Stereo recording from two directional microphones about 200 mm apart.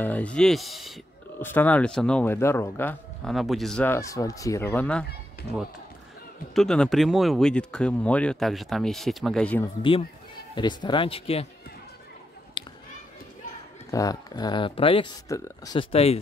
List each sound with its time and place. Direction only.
0.0 s speech: 5° left (ahead or behind)
6.5 s speech: centre (ahead or behind)
9.8 s speech: 25° left (ahead or behind)
12.6 s children playing: 25° left (ahead or behind)
13.8 s speech: 15° left (ahead or behind)